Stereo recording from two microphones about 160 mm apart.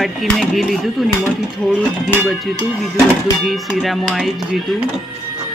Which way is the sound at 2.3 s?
Centre (ahead or behind).